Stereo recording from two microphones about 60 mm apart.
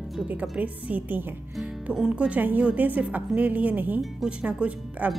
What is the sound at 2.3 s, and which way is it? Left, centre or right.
A woman's voice, right.